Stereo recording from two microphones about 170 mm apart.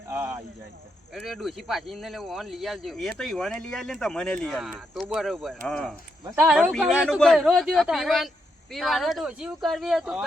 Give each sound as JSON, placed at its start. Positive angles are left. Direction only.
{"t": 0.1, "sound": "a sound", "side_deg": -15}
{"t": 1.1, "sound": "speech", "side_deg": 0}
{"t": 6.3, "sound": "speech", "side_deg": -10}